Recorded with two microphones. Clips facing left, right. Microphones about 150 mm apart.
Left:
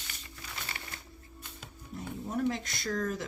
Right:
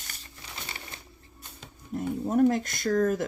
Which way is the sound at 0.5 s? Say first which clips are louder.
Right 2 dB; 25° right (ahead or behind).